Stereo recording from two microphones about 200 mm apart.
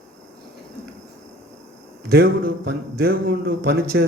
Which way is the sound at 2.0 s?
50° right (ahead or behind).